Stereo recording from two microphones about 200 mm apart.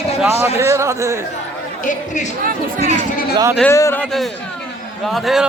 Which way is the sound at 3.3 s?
15° right (ahead or behind).